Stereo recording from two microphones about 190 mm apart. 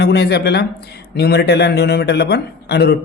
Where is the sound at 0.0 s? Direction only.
60° left (ahead or behind).